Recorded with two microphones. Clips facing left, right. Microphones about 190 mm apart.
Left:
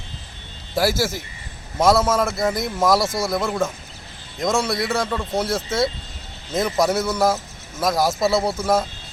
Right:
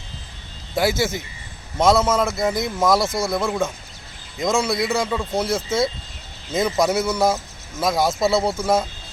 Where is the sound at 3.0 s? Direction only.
25° right (ahead or behind).